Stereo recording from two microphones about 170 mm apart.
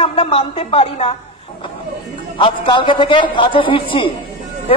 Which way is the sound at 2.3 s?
30° left (ahead or behind).